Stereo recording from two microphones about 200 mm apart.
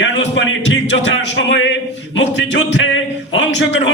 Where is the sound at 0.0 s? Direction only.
65° left (ahead or behind).